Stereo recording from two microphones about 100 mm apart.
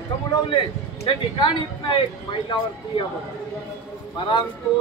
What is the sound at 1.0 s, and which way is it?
Speech, 50° left (ahead or behind).